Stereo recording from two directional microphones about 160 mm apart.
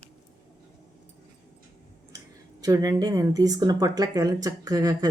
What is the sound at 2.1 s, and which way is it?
Speech, 20° right (ahead or behind).